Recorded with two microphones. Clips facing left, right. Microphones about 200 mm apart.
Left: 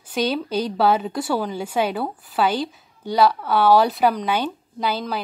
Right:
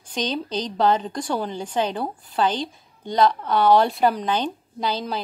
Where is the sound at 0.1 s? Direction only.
10° left (ahead or behind).